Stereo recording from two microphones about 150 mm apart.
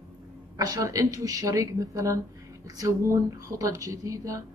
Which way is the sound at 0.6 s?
25° right (ahead or behind).